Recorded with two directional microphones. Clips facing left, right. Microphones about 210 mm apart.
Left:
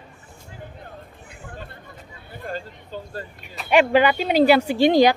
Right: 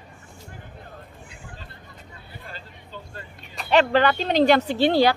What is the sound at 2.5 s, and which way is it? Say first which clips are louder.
Speech: left 12 dB; 45° left (ahead or behind).